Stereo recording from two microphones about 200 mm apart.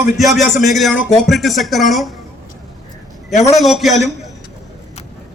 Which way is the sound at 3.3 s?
35° left (ahead or behind).